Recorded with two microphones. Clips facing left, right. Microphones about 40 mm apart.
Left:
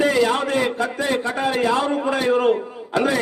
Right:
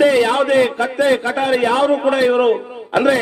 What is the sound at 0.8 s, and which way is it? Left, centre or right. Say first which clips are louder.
A man's voice: right 6 dB; right.